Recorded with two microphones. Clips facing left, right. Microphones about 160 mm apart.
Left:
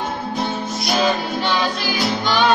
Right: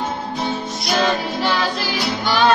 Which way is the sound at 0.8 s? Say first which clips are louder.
Even; centre (ahead or behind).